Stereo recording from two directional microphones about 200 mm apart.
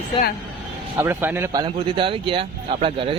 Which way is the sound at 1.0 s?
10° right (ahead or behind).